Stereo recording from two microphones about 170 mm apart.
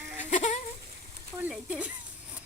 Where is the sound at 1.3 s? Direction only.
5° right (ahead or behind).